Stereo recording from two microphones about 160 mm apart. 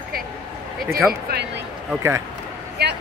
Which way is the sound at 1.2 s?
90° right.